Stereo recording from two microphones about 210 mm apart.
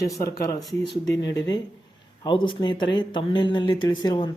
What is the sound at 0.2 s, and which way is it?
Speech, 15° left (ahead or behind).